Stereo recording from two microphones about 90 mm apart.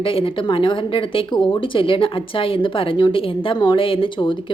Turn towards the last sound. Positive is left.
turn(degrees=70)  # may be behind; listen again after turning